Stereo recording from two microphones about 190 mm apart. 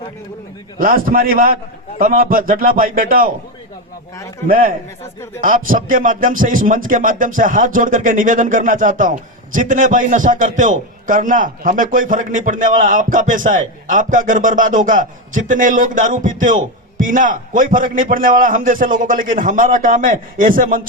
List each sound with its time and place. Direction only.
0.8 s a man's voice: 50° right (ahead or behind)
4.4 s a man's voice: 50° right (ahead or behind)